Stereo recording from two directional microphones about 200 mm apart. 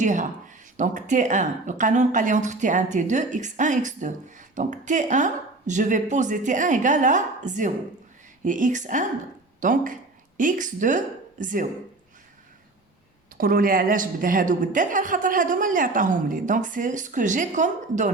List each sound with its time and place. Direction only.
0.0 s speech: 40° right (ahead or behind)
13.3 s speech: 45° right (ahead or behind)